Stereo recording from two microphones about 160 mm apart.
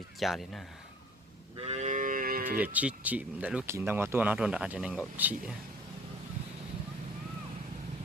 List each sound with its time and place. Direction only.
0.2 s speech: centre (ahead or behind)
1.5 s livestock: 40° right (ahead or behind); by 2.6 s 65° right (ahead or behind)
2.6 s speech: 10° right (ahead or behind)